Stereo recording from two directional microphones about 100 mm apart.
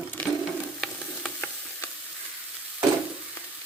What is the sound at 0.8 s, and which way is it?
Frying, 10° left (ahead or behind).